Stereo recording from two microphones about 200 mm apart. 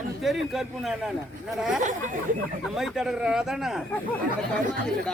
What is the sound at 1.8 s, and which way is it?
Speech, 40° right (ahead or behind).